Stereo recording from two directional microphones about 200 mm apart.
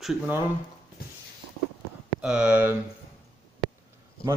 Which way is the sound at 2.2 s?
5° right (ahead or behind).